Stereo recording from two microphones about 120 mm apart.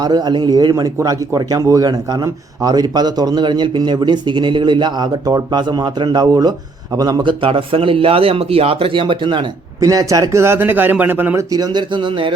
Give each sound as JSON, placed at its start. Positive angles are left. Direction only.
{"t": 0.0, "sound": "a man's voice", "side_deg": -35}
{"t": 9.8, "sound": "speech", "side_deg": -30}
{"t": 11.5, "sound": "a man's voice", "side_deg": -35}